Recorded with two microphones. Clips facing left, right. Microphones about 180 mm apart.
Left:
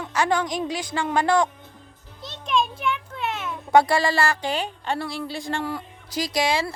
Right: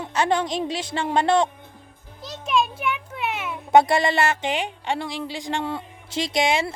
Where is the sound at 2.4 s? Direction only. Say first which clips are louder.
Right 1 dB; 5° right (ahead or behind).